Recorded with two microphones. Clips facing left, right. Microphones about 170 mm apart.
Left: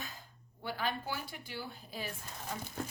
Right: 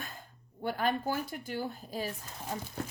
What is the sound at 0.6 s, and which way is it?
A woman's voice, 50° right (ahead or behind).